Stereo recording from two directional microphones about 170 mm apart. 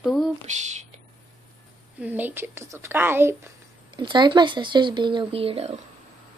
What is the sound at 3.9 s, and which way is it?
Speech, 25° right (ahead or behind).